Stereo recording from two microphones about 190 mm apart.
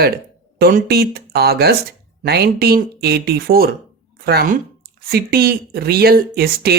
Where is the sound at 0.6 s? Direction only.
55° right (ahead or behind).